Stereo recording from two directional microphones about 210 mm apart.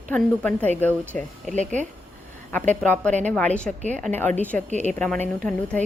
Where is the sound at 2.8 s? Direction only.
5° left (ahead or behind).